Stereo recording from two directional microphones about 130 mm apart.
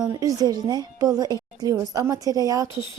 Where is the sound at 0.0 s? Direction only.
30° right (ahead or behind).